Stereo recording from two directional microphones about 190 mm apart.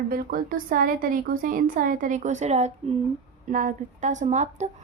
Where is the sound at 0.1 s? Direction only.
50° right (ahead or behind).